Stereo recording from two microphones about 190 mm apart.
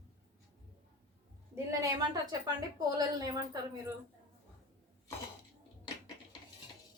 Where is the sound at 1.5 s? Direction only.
20° right (ahead or behind).